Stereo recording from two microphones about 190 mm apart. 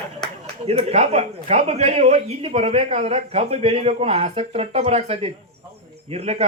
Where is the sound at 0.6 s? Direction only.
30° right (ahead or behind).